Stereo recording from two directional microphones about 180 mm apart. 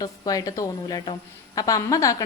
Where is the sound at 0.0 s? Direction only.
20° left (ahead or behind).